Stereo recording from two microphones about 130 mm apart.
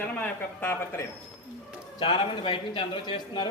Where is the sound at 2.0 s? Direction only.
40° left (ahead or behind).